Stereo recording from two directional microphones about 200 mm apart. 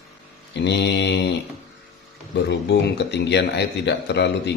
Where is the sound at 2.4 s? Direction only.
60° left (ahead or behind).